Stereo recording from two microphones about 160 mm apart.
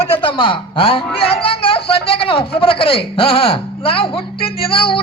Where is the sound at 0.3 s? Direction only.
30° left (ahead or behind).